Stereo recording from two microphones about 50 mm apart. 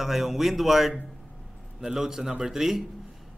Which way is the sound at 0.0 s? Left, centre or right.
Centre.